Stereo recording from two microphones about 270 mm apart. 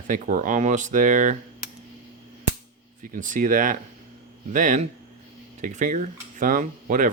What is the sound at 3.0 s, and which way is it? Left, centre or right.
Speech, right.